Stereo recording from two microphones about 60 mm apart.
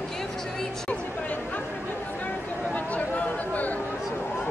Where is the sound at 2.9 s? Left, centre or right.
Left.